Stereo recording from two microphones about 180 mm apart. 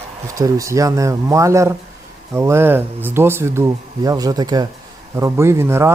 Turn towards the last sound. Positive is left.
turn(degrees=-15)  # may be behind; listen again after turning